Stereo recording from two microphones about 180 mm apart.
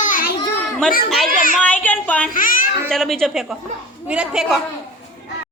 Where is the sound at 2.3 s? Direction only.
50° left (ahead or behind).